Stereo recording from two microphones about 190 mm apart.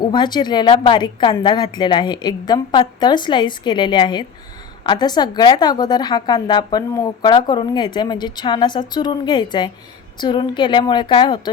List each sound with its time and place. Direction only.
0.0 s a woman's voice: 20° left (ahead or behind)